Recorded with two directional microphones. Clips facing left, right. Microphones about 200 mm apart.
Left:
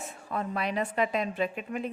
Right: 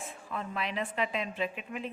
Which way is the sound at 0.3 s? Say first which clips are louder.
Left 5 dB; 40° left (ahead or behind).